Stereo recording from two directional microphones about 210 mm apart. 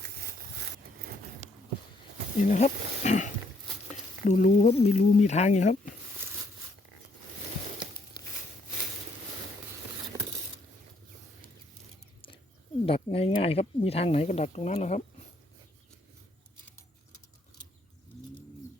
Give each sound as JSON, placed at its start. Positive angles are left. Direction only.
{"t": 2.5, "sound": "speech", "side_deg": 35}
{"t": 12.8, "sound": "speech", "side_deg": 25}